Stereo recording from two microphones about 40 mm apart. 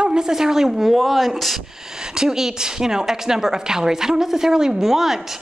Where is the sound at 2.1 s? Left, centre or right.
Centre.